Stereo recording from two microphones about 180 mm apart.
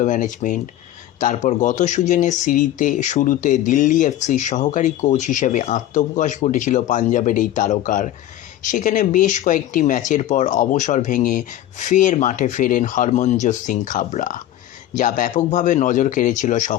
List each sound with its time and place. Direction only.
0.0 s speech: 45° left (ahead or behind)